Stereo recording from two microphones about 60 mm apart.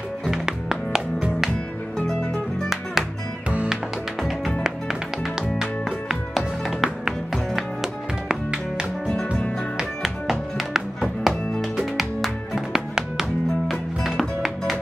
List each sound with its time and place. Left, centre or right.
0.3 s music: centre
2.0 s music: centre
2.7 s music: centre
5.6 s music: centre
9.8 s music: centre